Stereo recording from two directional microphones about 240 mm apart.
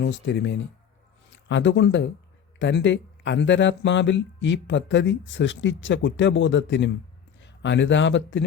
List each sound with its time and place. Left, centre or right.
0.0 s speech: left